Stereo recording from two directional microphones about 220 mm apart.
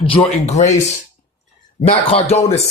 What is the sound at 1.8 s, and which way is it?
Speech, 25° left (ahead or behind).